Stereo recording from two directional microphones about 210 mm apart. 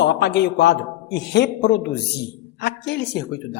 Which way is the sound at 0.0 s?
55° left (ahead or behind).